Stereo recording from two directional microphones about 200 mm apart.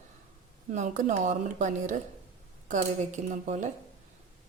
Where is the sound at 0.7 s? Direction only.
40° right (ahead or behind).